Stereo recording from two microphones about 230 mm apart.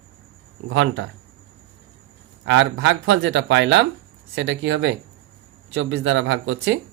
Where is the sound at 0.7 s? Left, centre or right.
Right.